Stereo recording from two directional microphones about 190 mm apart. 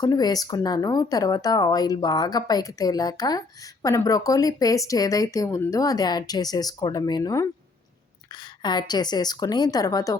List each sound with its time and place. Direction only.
0.0 s speech: 20° left (ahead or behind)